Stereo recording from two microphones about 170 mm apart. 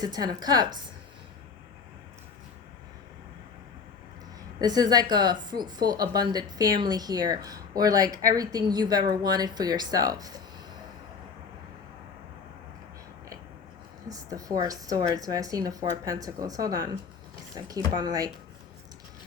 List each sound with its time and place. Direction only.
0.0 s a woman's voice: 25° right (ahead or behind)
4.6 s a woman's voice: 25° right (ahead or behind)
14.1 s a woman's voice: 20° right (ahead or behind)